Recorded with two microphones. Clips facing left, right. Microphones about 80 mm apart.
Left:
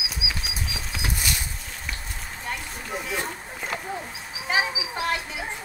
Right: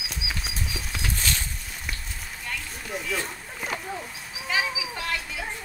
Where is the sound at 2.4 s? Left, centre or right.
Left.